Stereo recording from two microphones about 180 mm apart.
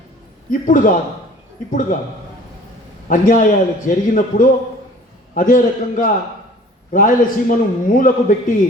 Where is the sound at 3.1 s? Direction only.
50° left (ahead or behind).